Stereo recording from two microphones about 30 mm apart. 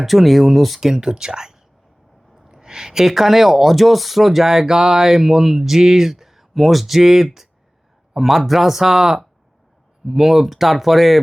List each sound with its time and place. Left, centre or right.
0.0 s speech: centre
0.8 s speech: centre
7.0 s speech: centre